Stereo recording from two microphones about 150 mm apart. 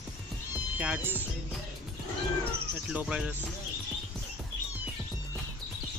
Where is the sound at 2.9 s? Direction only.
5° right (ahead or behind).